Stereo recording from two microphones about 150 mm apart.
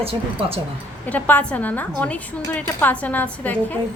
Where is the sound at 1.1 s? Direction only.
10° left (ahead or behind).